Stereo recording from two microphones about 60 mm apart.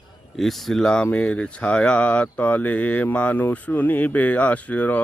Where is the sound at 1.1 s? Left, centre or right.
Left.